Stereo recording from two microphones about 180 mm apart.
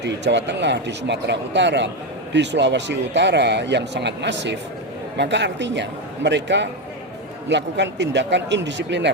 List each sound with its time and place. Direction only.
0.0 s speech: 75° right (ahead or behind)